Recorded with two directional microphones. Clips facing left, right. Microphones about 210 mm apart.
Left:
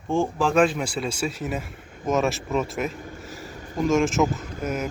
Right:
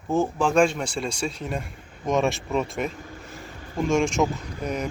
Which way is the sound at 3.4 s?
45° left (ahead or behind).